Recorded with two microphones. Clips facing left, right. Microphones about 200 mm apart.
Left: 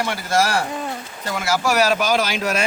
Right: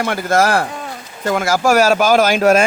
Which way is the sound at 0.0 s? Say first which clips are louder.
Right 5 dB; 55° right (ahead or behind).